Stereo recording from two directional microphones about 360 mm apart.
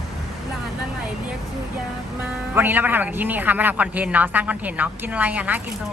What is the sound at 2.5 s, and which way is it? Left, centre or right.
A man's voice, centre.